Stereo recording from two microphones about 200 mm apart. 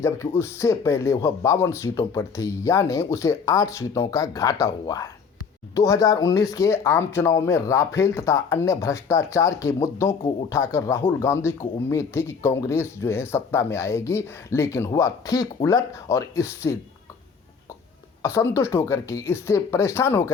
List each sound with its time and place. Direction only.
0.0 s speech: 15° left (ahead or behind)
18.2 s speech: 15° left (ahead or behind)